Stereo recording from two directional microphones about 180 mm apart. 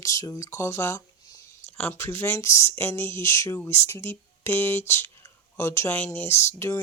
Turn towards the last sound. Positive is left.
turn(degrees=15)  # may be behind; listen again after turning